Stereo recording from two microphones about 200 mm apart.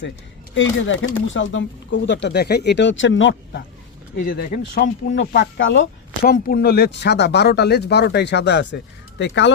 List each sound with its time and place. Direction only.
0.5 s speech: 70° left (ahead or behind)
4.3 s speech: 45° left (ahead or behind)
5.2 s speech: 60° left (ahead or behind)
6.2 s speech: 50° left (ahead or behind)